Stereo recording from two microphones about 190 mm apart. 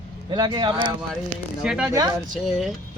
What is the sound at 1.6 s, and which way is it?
Speech, 5° right (ahead or behind).